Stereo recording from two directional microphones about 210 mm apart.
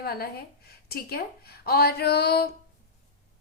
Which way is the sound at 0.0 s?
45° left (ahead or behind).